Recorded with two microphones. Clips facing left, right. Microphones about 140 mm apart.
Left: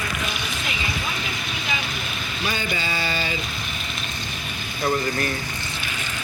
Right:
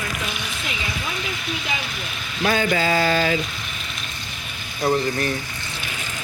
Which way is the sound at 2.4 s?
90° right.